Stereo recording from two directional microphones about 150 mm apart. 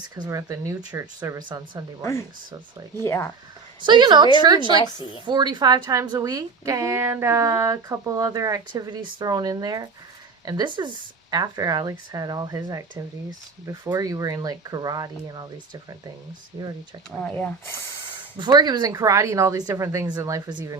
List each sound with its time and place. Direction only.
0.2 s a woman's voice: 25° right (ahead or behind)
2.0 s speech: 15° left (ahead or behind)
3.8 s a woman's voice: 30° right (ahead or behind)
4.8 s a woman's voice: 30° left (ahead or behind)
5.2 s a woman's voice: 30° right (ahead or behind)
17.1 s speech: 5° left (ahead or behind)
18.3 s a woman's voice: 30° right (ahead or behind)